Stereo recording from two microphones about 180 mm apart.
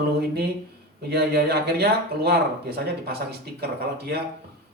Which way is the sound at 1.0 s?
60° right (ahead or behind).